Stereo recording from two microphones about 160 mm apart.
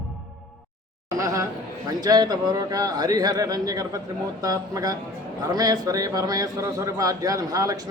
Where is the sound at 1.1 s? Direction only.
20° right (ahead or behind).